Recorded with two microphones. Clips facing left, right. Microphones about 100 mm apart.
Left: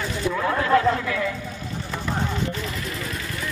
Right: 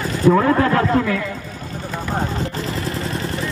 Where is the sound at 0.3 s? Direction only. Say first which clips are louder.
Right 6 dB; 55° right (ahead or behind).